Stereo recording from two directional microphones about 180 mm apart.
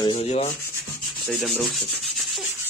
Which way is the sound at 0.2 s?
35° left (ahead or behind).